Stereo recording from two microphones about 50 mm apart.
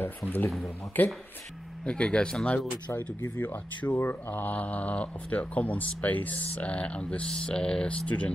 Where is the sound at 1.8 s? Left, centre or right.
Left.